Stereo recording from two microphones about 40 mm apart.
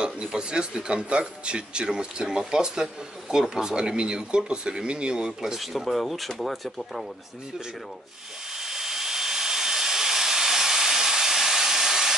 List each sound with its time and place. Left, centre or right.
0.0 s speech: right
5.6 s speech: centre
8.5 s a sound: centre